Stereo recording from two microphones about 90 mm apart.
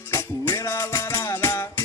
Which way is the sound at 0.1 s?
25° left (ahead or behind).